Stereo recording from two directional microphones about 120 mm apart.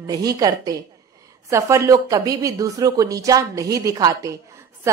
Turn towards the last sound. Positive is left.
turn(degrees=-30)  # may be behind; listen again after turning